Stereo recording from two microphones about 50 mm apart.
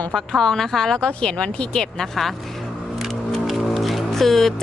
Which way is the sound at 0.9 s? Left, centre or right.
Centre.